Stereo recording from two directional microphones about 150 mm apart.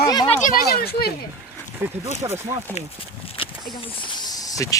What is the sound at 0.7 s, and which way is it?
Speech, 90° left.